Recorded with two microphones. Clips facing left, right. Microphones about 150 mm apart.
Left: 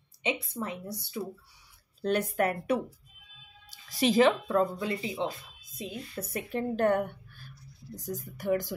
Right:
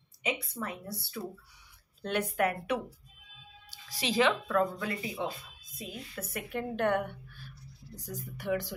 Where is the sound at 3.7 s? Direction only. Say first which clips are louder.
Left 7 dB; 50° left (ahead or behind).